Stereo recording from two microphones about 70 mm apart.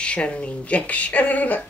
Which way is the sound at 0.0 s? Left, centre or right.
Centre.